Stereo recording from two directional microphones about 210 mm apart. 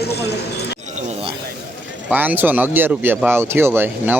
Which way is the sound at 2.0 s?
10° right (ahead or behind).